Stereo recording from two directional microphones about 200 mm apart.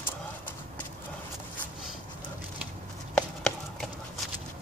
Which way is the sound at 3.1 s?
5° left (ahead or behind).